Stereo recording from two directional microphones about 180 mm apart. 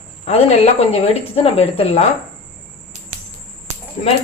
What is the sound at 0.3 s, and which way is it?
Speech, 35° left (ahead or behind).